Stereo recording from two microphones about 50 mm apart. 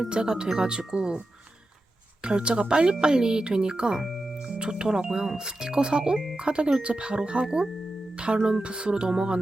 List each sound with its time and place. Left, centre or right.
0.1 s speech: centre
2.2 s speech: right